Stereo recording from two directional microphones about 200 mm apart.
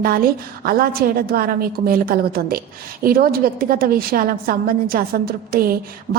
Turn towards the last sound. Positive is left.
turn(degrees=-45)  # may be behind; listen again after turning